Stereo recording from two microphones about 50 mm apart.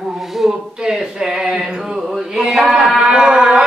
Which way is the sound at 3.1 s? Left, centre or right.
Centre.